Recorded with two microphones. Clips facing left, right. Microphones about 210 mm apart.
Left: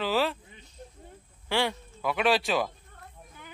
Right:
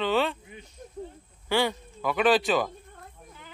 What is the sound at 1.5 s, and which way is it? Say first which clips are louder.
Speech: right 3 dB; centre (ahead or behind).